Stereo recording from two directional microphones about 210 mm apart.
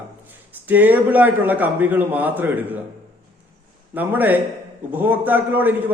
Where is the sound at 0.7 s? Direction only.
10° right (ahead or behind).